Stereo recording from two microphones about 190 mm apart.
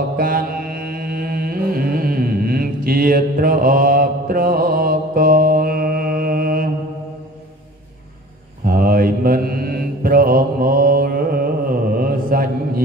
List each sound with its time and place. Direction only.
0.2 s chant: 50° right (ahead or behind)
8.6 s mantra: 50° right (ahead or behind)